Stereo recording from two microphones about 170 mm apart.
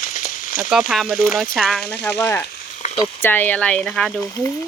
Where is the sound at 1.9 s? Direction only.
85° left.